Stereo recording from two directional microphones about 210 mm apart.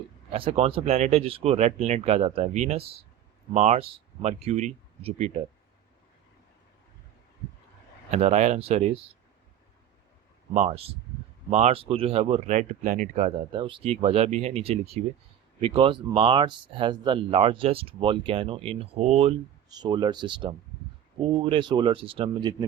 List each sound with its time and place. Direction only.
0.3 s speech: 25° right (ahead or behind)
8.1 s speech: 35° right (ahead or behind)
10.5 s speech: 30° right (ahead or behind)